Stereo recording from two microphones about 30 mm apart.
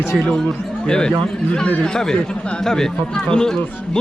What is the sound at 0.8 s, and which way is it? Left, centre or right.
Speech, left.